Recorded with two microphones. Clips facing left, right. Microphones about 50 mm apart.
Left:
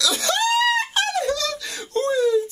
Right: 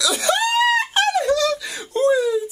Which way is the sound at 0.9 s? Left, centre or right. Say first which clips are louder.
Right 4 dB; right.